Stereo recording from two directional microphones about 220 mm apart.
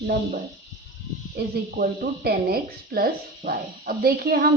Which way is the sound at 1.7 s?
40° right (ahead or behind).